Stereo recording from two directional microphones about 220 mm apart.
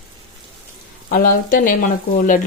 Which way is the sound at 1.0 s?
40° left (ahead or behind).